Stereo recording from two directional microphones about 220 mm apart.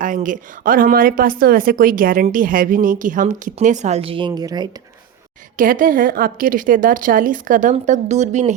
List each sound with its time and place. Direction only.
0.0 s a woman's voice: 35° right (ahead or behind); by 4.7 s 20° right (ahead or behind)
5.5 s a woman's voice: 40° right (ahead or behind)